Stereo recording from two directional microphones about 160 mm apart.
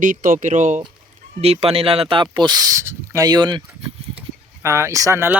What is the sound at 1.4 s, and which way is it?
Speech, 40° right (ahead or behind).